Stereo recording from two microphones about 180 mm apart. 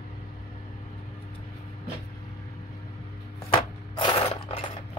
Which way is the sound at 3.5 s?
30° left (ahead or behind).